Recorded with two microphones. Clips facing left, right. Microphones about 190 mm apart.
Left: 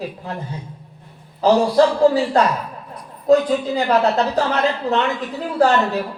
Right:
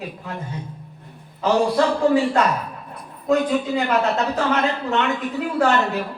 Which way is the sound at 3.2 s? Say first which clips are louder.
Left 4 dB; 35° left (ahead or behind).